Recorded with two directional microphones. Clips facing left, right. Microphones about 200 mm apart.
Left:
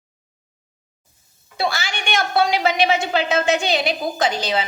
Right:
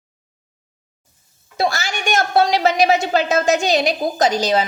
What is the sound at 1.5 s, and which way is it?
A woman's voice, 45° right (ahead or behind).